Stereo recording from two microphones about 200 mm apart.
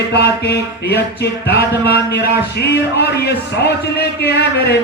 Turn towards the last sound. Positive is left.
turn(degrees=55)  # may be behind; listen again after turning